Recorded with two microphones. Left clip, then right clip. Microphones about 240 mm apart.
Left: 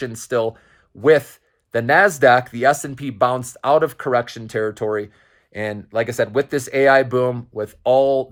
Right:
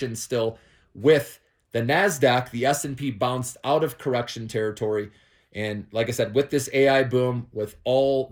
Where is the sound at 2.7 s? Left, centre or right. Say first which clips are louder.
Left 5 dB; centre.